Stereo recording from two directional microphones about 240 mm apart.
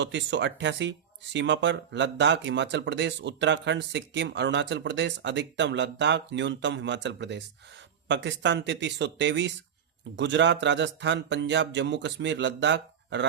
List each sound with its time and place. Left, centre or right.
0.0 s speech: right